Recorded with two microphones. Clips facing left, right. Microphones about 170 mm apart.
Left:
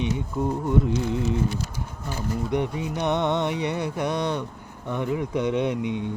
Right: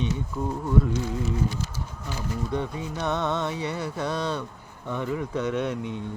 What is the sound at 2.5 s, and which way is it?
Speech, 15° left (ahead or behind).